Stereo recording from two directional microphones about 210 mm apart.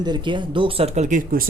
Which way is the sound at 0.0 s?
20° right (ahead or behind).